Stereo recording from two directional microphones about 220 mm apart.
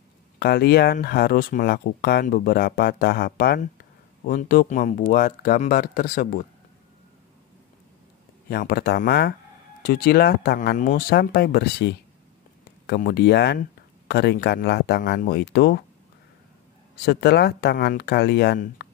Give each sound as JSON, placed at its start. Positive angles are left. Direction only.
{"t": 0.4, "sound": "speech", "side_deg": 45}
{"t": 8.5, "sound": "speech", "side_deg": 45}
{"t": 17.0, "sound": "speech", "side_deg": 45}